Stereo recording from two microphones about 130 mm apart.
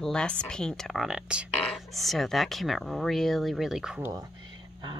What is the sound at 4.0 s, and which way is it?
Speech, 25° right (ahead or behind).